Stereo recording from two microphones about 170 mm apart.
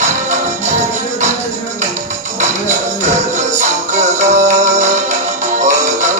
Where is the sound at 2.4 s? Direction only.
45° right (ahead or behind).